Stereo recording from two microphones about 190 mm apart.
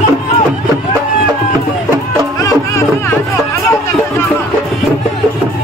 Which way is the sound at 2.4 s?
15° left (ahead or behind).